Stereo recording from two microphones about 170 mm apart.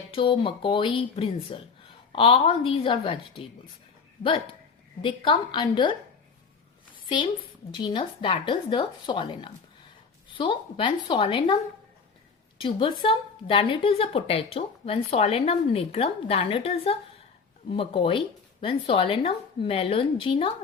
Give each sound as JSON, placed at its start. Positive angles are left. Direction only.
{"t": 0.1, "sound": "a woman's voice", "side_deg": 30}
{"t": 5.0, "sound": "a woman's voice", "side_deg": 30}
{"t": 7.0, "sound": "a sound", "side_deg": 30}
{"t": 7.7, "sound": "a woman's voice", "side_deg": 30}